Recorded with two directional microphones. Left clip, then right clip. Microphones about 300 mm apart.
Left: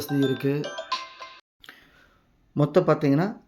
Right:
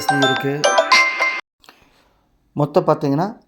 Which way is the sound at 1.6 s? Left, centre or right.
Centre.